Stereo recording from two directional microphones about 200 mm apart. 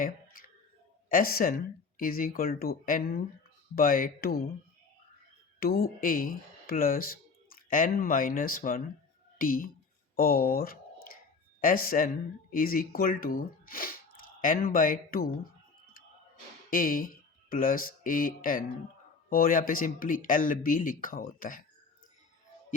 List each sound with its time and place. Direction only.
1.1 s speech: 45° left (ahead or behind)
5.5 s speech: 50° left (ahead or behind)
16.6 s speech: 45° left (ahead or behind)